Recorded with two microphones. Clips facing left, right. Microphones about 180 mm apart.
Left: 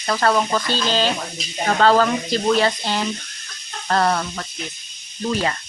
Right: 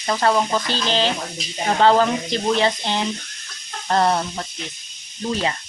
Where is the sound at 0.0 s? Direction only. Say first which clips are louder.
Even; 15° right (ahead or behind).